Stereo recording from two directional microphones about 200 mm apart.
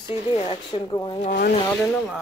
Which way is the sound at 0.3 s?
25° left (ahead or behind).